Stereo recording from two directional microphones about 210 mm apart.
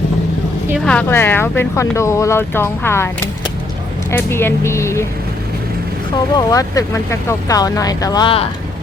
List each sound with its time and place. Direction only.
0.9 s speech: 10° left (ahead or behind)
4.1 s speech: 10° left (ahead or behind)
6.3 s speech: 15° left (ahead or behind)